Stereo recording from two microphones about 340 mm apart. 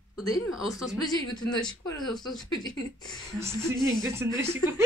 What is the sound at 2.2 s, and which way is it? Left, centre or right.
Speech, centre.